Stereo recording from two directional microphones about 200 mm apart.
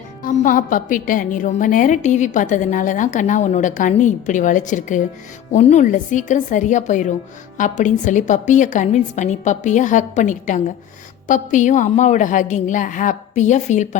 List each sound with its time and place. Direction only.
0.2 s a woman's voice: 40° left (ahead or behind)